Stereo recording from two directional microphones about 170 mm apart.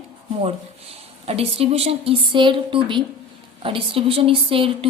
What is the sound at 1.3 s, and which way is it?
A woman's voice, 35° right (ahead or behind).